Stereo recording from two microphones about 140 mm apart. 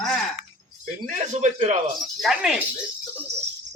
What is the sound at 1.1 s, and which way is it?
Speech, 55° right (ahead or behind).